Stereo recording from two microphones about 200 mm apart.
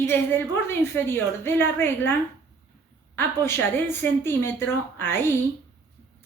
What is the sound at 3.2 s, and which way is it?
Speech, 10° left (ahead or behind).